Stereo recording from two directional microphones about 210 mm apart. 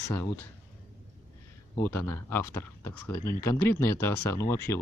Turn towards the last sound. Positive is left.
turn(degrees=10)  # may be behind; listen again after turning